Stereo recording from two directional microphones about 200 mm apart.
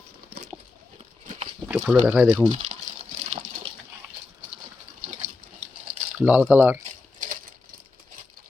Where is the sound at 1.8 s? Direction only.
10° right (ahead or behind).